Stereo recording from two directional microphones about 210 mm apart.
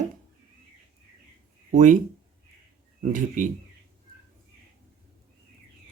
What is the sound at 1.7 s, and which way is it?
Speech, 40° right (ahead or behind).